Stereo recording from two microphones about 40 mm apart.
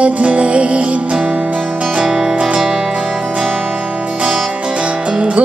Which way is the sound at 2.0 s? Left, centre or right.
Centre.